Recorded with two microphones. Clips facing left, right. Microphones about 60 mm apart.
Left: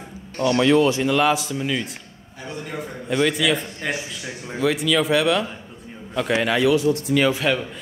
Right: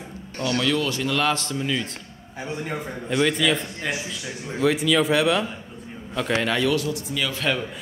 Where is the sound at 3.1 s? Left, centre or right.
Centre.